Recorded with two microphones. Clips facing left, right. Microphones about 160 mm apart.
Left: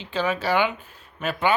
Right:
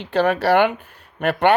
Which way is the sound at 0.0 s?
65° right (ahead or behind).